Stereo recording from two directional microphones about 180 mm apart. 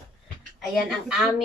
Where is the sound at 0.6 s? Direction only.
Centre (ahead or behind).